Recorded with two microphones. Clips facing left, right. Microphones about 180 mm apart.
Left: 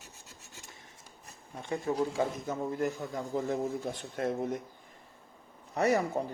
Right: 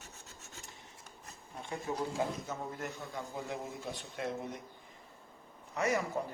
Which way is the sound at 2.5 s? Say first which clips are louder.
Left 8 dB; 45° left (ahead or behind).